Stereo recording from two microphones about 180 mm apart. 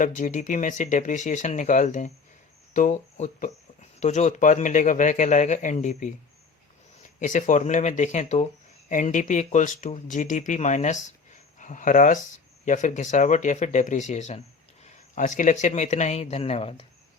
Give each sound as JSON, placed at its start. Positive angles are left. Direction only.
{"t": 0.0, "sound": "speech", "side_deg": 45}